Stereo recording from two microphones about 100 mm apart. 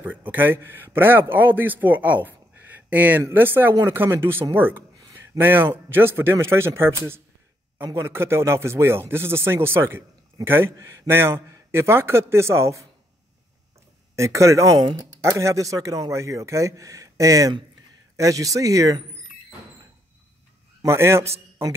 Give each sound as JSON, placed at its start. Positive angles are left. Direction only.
{"t": 0.0, "sound": "a man's voice", "side_deg": -20}
{"t": 14.1, "sound": "speech", "side_deg": -30}
{"t": 20.8, "sound": "a man's voice", "side_deg": -25}